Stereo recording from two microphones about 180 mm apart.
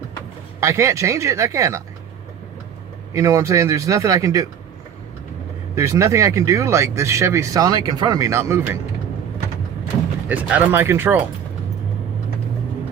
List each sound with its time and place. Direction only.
0.6 s speech: 15° right (ahead or behind)
3.1 s speech: 15° right (ahead or behind)
5.7 s speech: 15° right (ahead or behind)
10.2 s speech: 10° right (ahead or behind)